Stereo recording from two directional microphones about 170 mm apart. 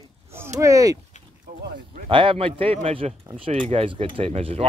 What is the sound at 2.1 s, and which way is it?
Speech, 30° right (ahead or behind).